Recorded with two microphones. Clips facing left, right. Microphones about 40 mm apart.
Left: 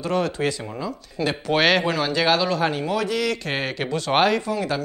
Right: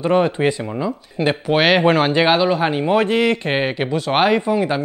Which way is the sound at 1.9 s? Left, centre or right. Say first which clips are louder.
Right 8 dB; right.